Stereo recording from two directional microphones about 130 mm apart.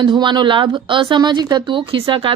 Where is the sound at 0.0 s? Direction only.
35° right (ahead or behind).